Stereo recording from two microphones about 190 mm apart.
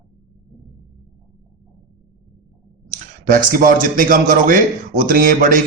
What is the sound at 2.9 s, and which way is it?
Speech, 45° right (ahead or behind).